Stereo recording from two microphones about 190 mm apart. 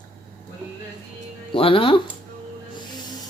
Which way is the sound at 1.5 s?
30° left (ahead or behind).